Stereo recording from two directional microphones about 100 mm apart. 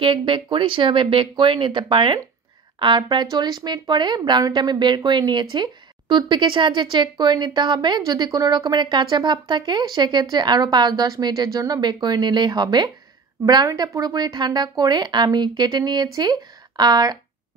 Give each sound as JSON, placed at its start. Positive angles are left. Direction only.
{"t": 0.0, "sound": "speech", "side_deg": -55}
{"t": 13.7, "sound": "speech", "side_deg": -30}